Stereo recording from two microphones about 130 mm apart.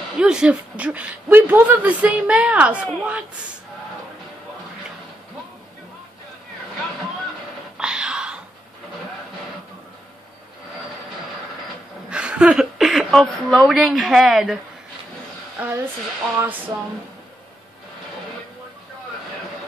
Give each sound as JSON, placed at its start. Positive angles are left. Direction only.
{"t": 0.2, "sound": "speech", "side_deg": -5}
{"t": 7.7, "sound": "a sound", "side_deg": -5}
{"t": 12.1, "sound": "a woman's voice", "side_deg": -5}
{"t": 15.6, "sound": "speech", "side_deg": -15}